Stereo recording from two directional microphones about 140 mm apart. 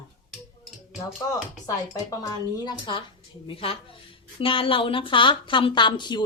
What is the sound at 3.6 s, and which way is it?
A woman's voice, 40° left (ahead or behind).